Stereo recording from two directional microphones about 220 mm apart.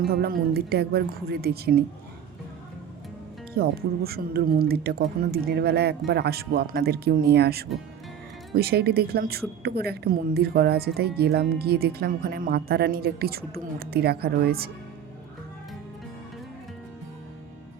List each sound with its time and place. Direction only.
0.1 s speech: 45° right (ahead or behind)
3.5 s speech: 45° right (ahead or behind)